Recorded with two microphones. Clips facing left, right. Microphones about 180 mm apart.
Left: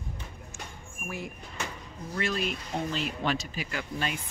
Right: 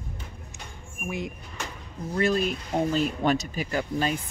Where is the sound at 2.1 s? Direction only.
40° right (ahead or behind).